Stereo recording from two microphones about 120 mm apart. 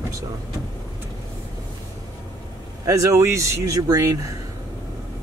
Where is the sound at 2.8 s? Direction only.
30° right (ahead or behind).